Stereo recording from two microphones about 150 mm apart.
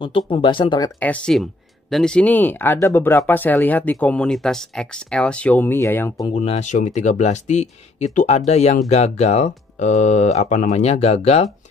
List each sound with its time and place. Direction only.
0.3 s speech: 35° left (ahead or behind)
0.9 s speech: 10° left (ahead or behind)
6.3 s speech: 45° left (ahead or behind)